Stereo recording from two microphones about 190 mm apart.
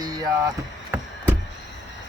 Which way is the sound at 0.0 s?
20° right (ahead or behind).